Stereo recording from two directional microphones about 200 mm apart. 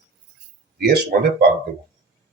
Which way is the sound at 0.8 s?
50° right (ahead or behind).